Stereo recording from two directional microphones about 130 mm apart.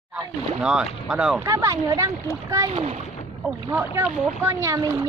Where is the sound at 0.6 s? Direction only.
5° right (ahead or behind).